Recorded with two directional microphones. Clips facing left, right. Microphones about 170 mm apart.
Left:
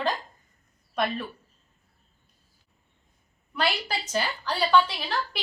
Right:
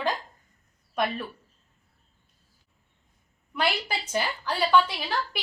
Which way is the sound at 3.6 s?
10° right (ahead or behind).